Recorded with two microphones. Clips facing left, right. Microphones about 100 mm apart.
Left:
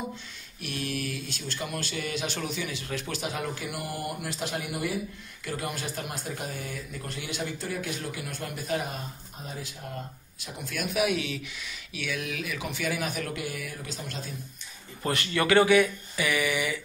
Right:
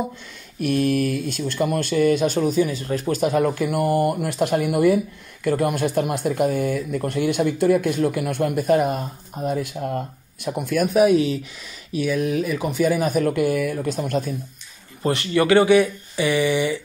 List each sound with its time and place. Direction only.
0.6 s speech: 50° right (ahead or behind)
15.0 s speech: 25° right (ahead or behind)